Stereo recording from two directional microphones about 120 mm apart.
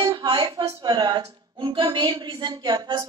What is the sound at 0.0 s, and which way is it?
Speech, 40° right (ahead or behind).